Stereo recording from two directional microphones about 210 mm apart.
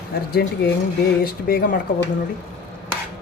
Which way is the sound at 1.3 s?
45° left (ahead or behind).